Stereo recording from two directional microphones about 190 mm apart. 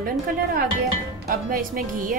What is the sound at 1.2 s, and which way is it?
Speech, 45° right (ahead or behind).